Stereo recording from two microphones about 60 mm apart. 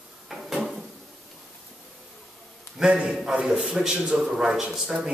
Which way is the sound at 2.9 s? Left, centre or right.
Centre.